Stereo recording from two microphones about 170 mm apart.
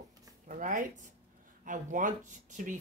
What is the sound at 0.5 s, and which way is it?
A woman's voice, 50° right (ahead or behind).